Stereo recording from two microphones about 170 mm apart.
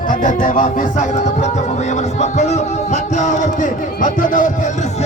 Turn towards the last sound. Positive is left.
turn(degrees=50)  # may be behind; listen again after turning